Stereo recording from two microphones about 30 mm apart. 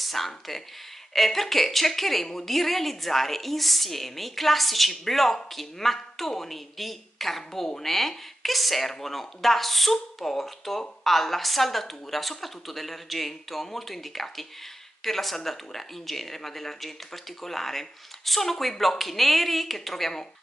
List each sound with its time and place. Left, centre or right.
0.0 s speech: centre